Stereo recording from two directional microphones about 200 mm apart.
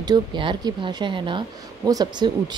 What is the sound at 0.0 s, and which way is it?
A woman's voice, 20° right (ahead or behind).